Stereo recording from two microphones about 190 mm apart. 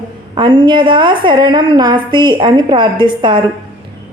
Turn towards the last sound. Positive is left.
turn(degrees=-25)  # may be behind; listen again after turning